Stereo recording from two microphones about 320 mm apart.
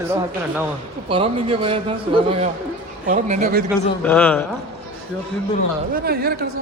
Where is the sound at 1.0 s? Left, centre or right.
Centre.